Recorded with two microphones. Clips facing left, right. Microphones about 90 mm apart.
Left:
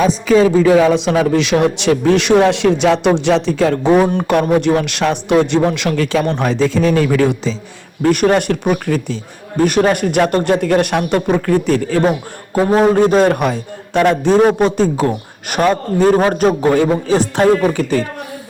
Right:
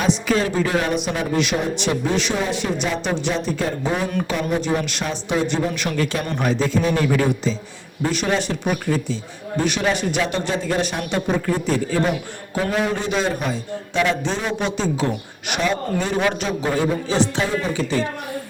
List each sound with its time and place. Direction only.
0.9 s a man's voice: 90° left
8.0 s speech: 55° left (ahead or behind)
12.7 s a man's voice: 45° left (ahead or behind); by 14.0 s 65° left (ahead or behind)
14.0 s a man's voice: 50° left (ahead or behind)